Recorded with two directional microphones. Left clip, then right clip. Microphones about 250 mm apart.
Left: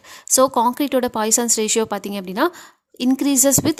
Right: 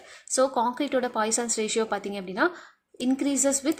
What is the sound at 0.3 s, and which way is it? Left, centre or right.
Speech, left.